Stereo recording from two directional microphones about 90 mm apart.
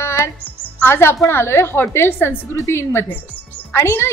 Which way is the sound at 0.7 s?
25° left (ahead or behind).